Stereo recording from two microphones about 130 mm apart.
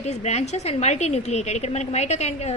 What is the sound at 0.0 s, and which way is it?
A woman's voice, 60° left (ahead or behind).